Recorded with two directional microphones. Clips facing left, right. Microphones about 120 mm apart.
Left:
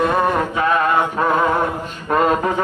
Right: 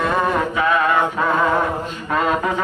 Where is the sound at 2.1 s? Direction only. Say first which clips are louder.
Left 3 dB; 40° left (ahead or behind).